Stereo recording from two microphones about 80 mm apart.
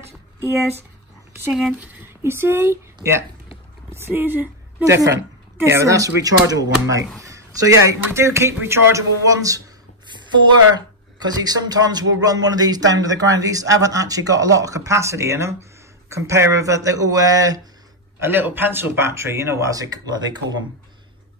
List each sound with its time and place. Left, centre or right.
1.7 s speech: centre
2.2 s a woman's voice: right
4.8 s speech: right
7.2 s a sound: right
8.1 s speech: right
11.1 s speech: right
18.2 s speech: right